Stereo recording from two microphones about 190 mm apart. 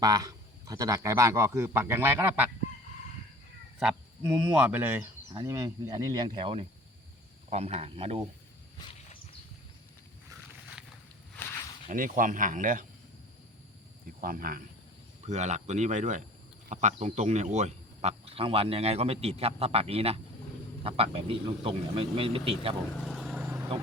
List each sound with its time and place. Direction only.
0.0 s a man's voice: 20° right (ahead or behind)
3.8 s a man's voice: 5° right (ahead or behind); by 8.2 s 30° right (ahead or behind)
8.8 s cricket: 30° left (ahead or behind)
11.3 s a sound: 15° left (ahead or behind)
11.9 s speech: 45° right (ahead or behind)
14.2 s speech: 50° right (ahead or behind)
15.3 s speech: 35° right (ahead or behind)
23.0 s vehicle: centre (ahead or behind)